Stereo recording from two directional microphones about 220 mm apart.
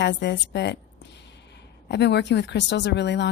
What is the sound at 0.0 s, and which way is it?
A woman's voice, 50° left (ahead or behind).